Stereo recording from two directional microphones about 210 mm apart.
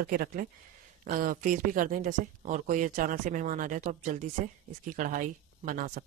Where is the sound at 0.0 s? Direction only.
45° right (ahead or behind).